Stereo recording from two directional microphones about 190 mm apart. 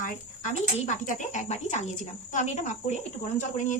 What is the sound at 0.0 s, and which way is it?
Speech, 40° left (ahead or behind).